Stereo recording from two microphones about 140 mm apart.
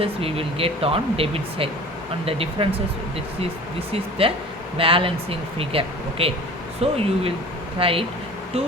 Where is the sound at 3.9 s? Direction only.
40° right (ahead or behind).